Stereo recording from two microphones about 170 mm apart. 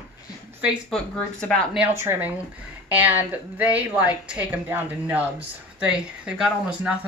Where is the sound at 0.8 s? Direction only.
5° left (ahead or behind).